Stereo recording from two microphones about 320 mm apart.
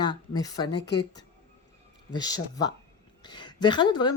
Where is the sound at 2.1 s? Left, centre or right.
Centre.